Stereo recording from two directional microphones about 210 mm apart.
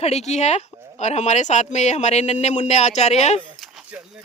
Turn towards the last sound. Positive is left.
turn(degrees=-5)  # may be behind; listen again after turning